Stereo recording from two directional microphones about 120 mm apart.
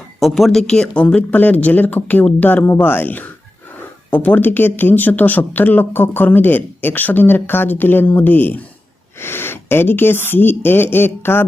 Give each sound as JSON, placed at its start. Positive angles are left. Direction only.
{"t": 0.2, "sound": "speech", "side_deg": 0}